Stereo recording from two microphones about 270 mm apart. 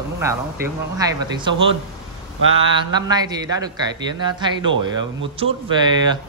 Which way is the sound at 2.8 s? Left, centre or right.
Centre.